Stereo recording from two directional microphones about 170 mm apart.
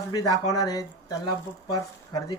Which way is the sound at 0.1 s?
20° left (ahead or behind).